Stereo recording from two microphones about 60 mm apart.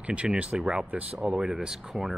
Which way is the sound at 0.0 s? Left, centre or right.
Centre.